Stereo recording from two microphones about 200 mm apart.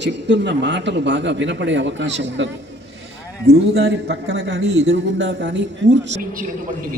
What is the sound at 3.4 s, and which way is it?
A man's voice, 55° right (ahead or behind).